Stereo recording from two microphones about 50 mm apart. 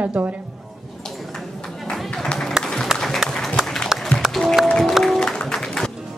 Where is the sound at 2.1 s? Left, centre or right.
Centre.